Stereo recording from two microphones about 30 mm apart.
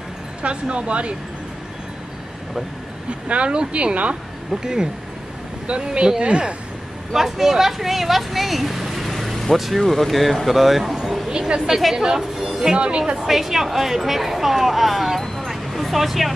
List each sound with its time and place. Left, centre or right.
0.4 s speech: right
3.1 s speech: right
4.5 s speech: centre
5.9 s speech: right
6.2 s speech: right
7.2 s speech: centre
9.1 s vehicle: centre
9.8 s speech: centre
11.2 s a woman's voice: right
11.9 s speech: centre
12.7 s speech: right
13.2 s speech: centre
15.2 s vehicle: centre
15.5 s a sound: centre